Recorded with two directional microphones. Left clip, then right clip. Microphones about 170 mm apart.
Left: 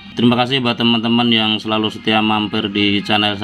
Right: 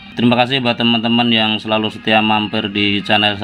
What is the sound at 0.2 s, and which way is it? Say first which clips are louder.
Speech: right 1 dB; 5° right (ahead or behind).